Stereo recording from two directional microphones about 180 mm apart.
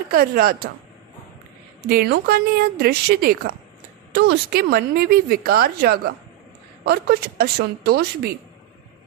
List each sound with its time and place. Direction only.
0.1 s a woman's voice: 55° right (ahead or behind)
1.9 s a woman's voice: 60° right (ahead or behind)